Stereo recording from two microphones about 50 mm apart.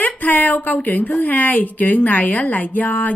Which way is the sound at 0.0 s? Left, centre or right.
Left.